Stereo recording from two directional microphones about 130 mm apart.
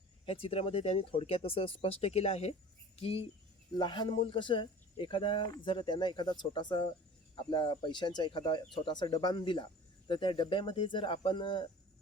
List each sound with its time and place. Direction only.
0.3 s speech: 45° left (ahead or behind)
3.8 s speech: 35° left (ahead or behind)